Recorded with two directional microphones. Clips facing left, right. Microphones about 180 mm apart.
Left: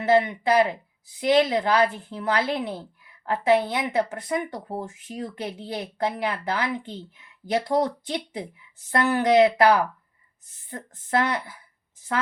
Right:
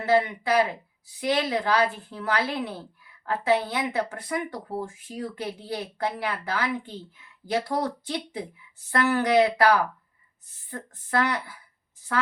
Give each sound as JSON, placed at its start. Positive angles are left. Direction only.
{"t": 0.0, "sound": "speech", "side_deg": 20}